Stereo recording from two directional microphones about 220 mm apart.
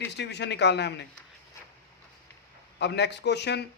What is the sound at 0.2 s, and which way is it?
Speech, 50° left (ahead or behind).